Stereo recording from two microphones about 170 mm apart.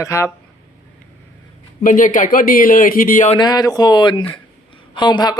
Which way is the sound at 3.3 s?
25° left (ahead or behind).